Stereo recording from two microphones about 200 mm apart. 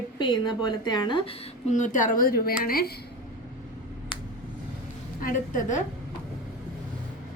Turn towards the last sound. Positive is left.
turn(degrees=40)  # may be behind; listen again after turning